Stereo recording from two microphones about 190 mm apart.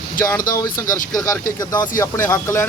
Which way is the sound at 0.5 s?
20° left (ahead or behind).